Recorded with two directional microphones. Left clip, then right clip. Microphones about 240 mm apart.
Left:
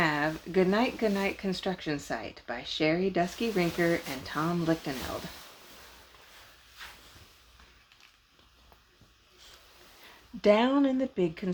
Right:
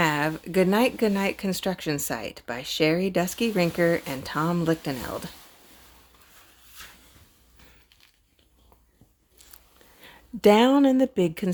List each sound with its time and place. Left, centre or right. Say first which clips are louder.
0.0 s speech: right 4 dB; right
10.4 s speech: right 6 dB; right